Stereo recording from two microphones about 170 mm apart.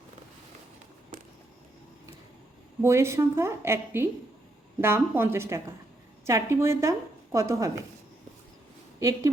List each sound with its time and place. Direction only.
2.8 s a woman's voice: 15° right (ahead or behind)
9.0 s a woman's voice: 20° right (ahead or behind)